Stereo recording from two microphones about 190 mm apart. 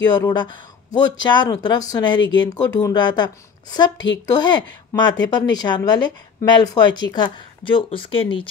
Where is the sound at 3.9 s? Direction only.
70° left (ahead or behind).